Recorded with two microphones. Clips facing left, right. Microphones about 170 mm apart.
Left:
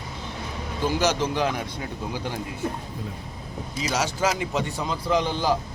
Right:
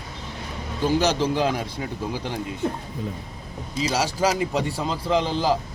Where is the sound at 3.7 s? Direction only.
30° right (ahead or behind).